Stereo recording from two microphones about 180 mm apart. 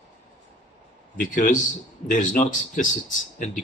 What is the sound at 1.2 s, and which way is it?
Speech, 50° left (ahead or behind).